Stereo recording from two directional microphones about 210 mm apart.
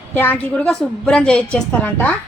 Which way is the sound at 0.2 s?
10° left (ahead or behind).